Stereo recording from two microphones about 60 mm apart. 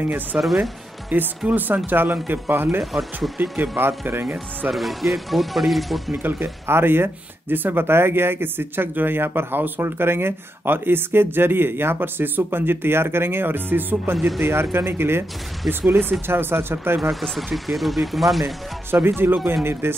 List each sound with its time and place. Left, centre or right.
0.0 s speech: right
2.8 s speech: centre
3.2 s speech: right
4.6 s speech: centre
6.1 s speech: right
17.1 s speech: centre
18.9 s speech: right